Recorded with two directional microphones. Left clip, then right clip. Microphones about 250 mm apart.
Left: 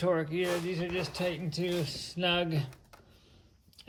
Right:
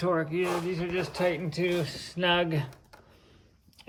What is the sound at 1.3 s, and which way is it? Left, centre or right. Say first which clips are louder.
Speech: right 5 dB; centre.